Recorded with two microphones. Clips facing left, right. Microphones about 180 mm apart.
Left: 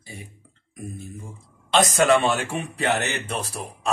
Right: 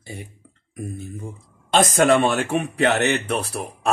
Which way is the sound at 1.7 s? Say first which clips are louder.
Right 2 dB; 45° right (ahead or behind).